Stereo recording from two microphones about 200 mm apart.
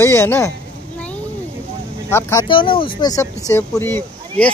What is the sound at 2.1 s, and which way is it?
Speech, 15° left (ahead or behind).